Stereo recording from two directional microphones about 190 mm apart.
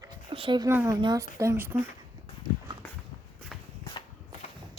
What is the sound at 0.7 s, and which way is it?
Speech, 10° right (ahead or behind).